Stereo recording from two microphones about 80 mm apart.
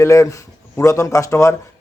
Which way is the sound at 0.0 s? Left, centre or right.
Left.